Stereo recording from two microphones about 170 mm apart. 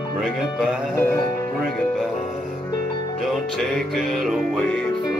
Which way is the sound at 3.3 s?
Centre (ahead or behind).